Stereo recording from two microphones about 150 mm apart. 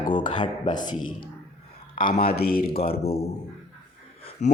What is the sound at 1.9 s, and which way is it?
Speech, 65° left (ahead or behind).